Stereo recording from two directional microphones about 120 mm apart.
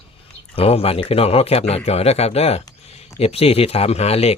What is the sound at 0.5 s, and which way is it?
Speech, 55° left (ahead or behind).